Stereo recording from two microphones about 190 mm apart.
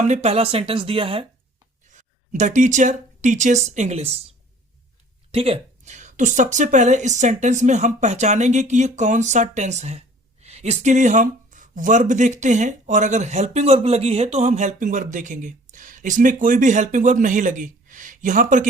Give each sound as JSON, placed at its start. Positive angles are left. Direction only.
{"t": 0.0, "sound": "speech", "side_deg": -35}
{"t": 1.9, "sound": "speech", "side_deg": -40}
{"t": 5.3, "sound": "speech", "side_deg": -30}